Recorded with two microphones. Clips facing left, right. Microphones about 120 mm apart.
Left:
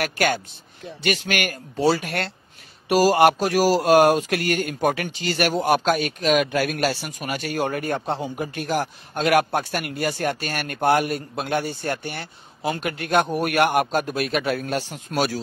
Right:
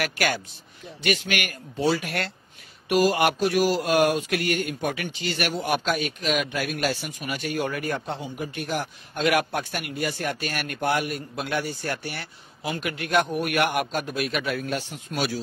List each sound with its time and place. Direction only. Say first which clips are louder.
0.0 s speech: left 3 dB; 35° left (ahead or behind)
6.9 s speech: left 2 dB; 65° left (ahead or behind)
7.2 s a man's voice: left 2 dB; 50° left (ahead or behind)
7.6 s a man's voice: left 4 dB; 35° left (ahead or behind)